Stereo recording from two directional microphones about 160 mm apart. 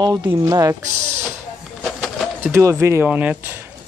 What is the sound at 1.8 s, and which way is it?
Pigeon, centre (ahead or behind).